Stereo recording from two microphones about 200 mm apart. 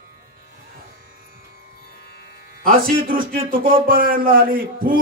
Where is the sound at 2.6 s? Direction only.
45° right (ahead or behind).